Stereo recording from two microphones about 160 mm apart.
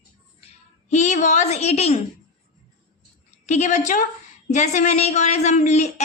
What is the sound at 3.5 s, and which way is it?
A woman's voice, 45° left (ahead or behind).